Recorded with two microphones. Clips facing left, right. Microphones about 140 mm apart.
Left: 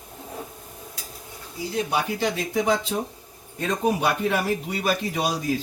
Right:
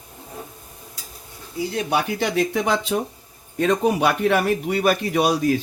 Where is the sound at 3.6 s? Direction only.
90° right.